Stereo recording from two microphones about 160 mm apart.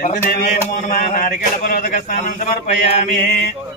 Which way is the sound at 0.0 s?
65° left (ahead or behind).